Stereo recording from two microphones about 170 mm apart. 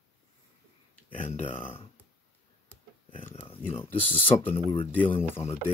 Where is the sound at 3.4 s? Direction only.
30° left (ahead or behind).